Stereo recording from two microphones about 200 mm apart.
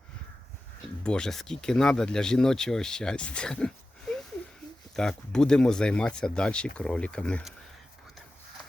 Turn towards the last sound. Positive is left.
turn(degrees=5)  # may be behind; listen again after turning